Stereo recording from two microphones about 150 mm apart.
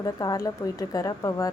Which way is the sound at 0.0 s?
25° left (ahead or behind).